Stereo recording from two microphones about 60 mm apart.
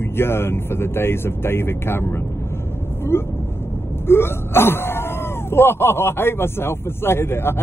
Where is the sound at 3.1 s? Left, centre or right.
Left.